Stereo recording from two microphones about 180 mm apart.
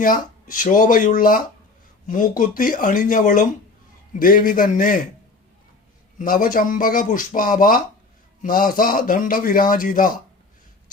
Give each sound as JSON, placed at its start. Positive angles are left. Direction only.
{"t": 0.0, "sound": "a man's voice", "side_deg": 50}
{"t": 6.1, "sound": "a man's voice", "side_deg": 50}